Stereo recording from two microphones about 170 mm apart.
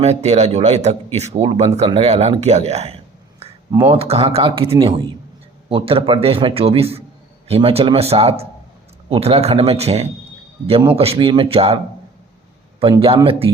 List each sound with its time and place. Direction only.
0.0 s speech: 40° right (ahead or behind)
12.8 s speech: 30° right (ahead or behind)